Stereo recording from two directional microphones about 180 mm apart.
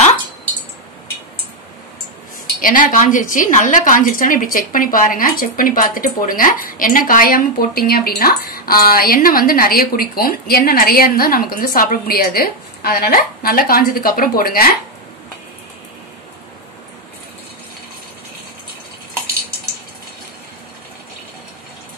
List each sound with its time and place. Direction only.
2.6 s a woman's voice: 50° left (ahead or behind)